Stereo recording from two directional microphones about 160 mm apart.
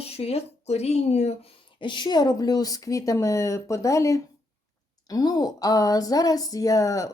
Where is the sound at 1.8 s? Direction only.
30° left (ahead or behind).